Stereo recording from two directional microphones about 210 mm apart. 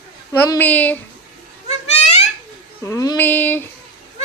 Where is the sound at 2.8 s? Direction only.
15° left (ahead or behind).